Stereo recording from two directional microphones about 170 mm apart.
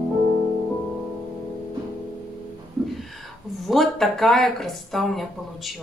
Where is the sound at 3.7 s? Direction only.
Centre (ahead or behind).